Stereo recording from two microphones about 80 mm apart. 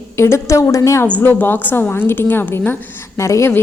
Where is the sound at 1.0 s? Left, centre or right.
Left.